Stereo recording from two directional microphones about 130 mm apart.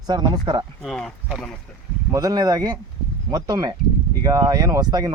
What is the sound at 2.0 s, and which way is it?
Speech, 25° right (ahead or behind).